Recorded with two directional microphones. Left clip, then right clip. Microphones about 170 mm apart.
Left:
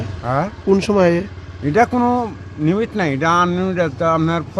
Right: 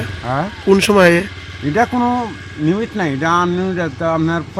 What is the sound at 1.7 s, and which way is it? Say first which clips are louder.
Speech: left 1 dB; 25° left (ahead or behind).